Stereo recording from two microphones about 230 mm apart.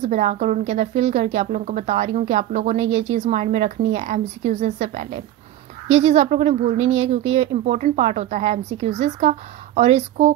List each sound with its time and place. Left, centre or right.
0.0 s a woman's voice: right